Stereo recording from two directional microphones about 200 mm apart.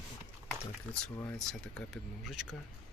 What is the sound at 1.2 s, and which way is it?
Speech, 5° left (ahead or behind).